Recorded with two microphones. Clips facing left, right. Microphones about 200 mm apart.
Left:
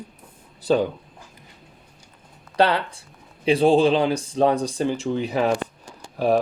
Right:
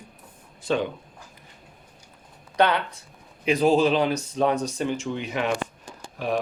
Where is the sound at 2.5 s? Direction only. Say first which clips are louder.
Left 2 dB; 30° left (ahead or behind).